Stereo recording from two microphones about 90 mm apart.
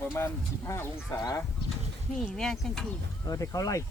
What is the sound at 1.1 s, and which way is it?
Speech, 45° left (ahead or behind).